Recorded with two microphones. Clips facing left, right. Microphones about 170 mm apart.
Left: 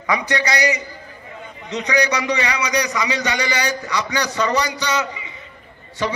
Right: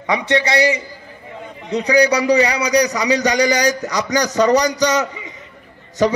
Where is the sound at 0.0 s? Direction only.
25° right (ahead or behind).